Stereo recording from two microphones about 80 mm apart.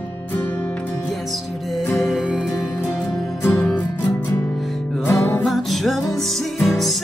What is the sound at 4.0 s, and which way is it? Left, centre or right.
Music, left.